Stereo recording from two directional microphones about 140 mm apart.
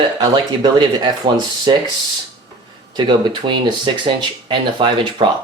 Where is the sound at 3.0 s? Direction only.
30° right (ahead or behind).